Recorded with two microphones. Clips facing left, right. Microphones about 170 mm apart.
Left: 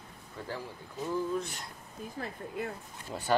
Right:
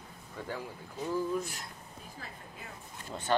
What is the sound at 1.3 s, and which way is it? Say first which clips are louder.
Speech: even; centre (ahead or behind).